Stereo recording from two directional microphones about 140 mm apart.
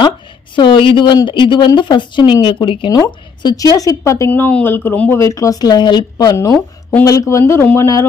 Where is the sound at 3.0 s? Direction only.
25° left (ahead or behind).